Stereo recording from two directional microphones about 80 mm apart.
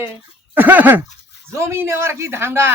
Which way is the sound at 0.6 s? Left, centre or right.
Right.